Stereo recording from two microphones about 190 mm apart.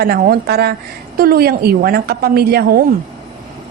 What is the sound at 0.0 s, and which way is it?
A woman's voice, 55° right (ahead or behind).